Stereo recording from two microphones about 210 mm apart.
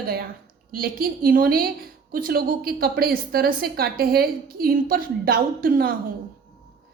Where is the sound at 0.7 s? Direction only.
45° right (ahead or behind).